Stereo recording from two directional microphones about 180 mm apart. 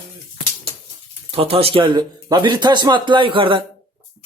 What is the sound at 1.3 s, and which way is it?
Speech, 35° right (ahead or behind).